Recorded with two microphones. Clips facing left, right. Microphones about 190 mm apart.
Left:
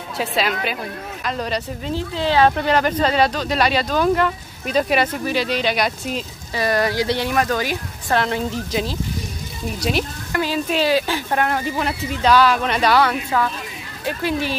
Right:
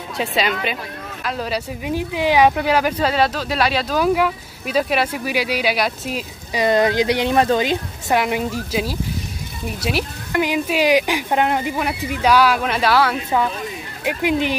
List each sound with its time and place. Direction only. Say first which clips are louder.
0.2 s speech: right 1 dB; centre (ahead or behind)
1.9 s speech: right 2 dB; 15° right (ahead or behind)
6.5 s speech: right 3 dB; 20° right (ahead or behind); by 10.0 s 5° right (ahead or behind)
10.3 s speech: right 2 dB; 15° right (ahead or behind)
13.3 s speech: right 2 dB; 20° right (ahead or behind)